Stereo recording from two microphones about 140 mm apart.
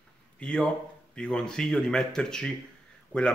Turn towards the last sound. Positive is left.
turn(degrees=10)  # may be behind; listen again after turning